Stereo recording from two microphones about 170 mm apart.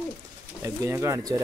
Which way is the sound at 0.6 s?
15° right (ahead or behind).